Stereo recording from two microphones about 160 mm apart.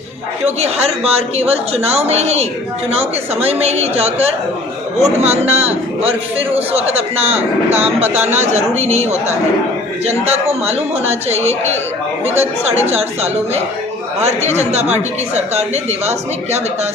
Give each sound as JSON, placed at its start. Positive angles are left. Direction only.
{"t": 0.4, "sound": "a man's voice", "side_deg": -40}
{"t": 8.0, "sound": "speech", "side_deg": -10}
{"t": 8.3, "sound": "a man's voice", "side_deg": -45}
{"t": 12.9, "sound": "a man's voice", "side_deg": -40}